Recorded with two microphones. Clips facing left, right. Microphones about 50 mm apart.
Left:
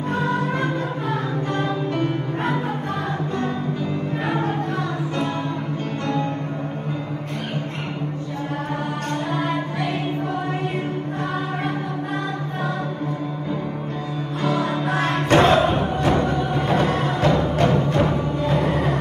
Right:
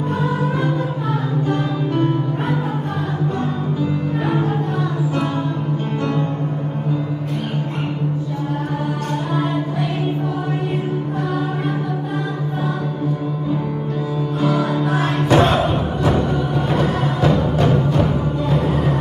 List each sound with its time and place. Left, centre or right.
14.4 s music: left